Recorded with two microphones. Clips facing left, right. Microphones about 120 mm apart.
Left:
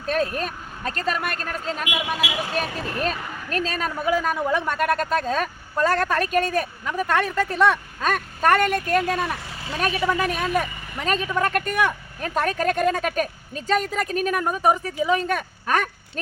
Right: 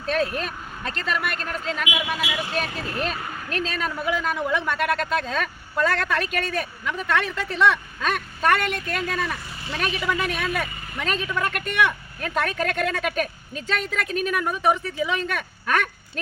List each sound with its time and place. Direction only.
0.1 s speech: 45° left (ahead or behind)